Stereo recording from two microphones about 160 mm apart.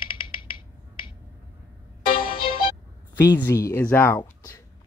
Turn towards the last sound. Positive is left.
turn(degrees=10)  # may be behind; listen again after turning